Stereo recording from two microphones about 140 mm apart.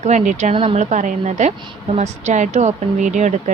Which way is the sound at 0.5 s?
40° right (ahead or behind).